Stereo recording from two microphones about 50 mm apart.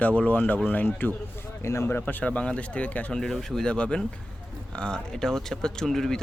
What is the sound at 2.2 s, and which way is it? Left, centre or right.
Speech, left.